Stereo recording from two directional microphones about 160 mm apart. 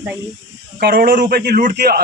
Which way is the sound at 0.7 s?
65° right (ahead or behind).